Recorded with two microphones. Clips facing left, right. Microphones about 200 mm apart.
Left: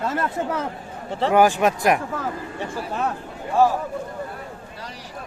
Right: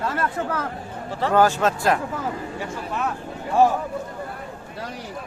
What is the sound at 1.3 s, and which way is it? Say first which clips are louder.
Speech: left 1 dB; 15° left (ahead or behind).